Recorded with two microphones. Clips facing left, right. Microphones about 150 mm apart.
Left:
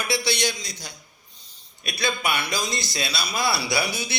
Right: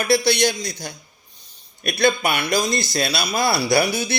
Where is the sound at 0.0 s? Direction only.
50° right (ahead or behind).